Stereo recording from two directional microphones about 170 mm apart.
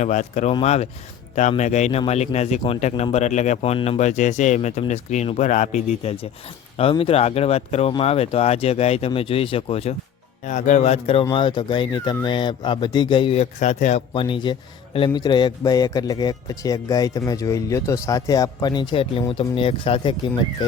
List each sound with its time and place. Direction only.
0.0 s speech: 45° left (ahead or behind)
6.9 s speech: 35° left (ahead or behind)
10.4 s a man's voice: 45° left (ahead or behind)
14.1 s a man's voice: 30° left (ahead or behind)